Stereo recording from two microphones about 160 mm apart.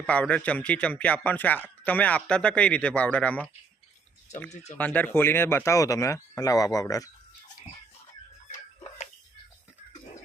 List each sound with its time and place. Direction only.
0.0 s a man's voice: 10° left (ahead or behind)
4.8 s speech: 10° left (ahead or behind)
8.4 s tick-tock: 45° left (ahead or behind)